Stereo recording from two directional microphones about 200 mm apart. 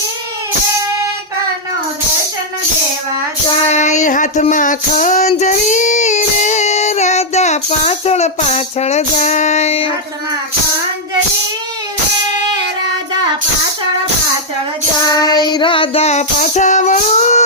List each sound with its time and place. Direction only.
3.7 s child singing: 35° left (ahead or behind)
15.1 s child singing: 20° left (ahead or behind); by 17.4 s 35° left (ahead or behind)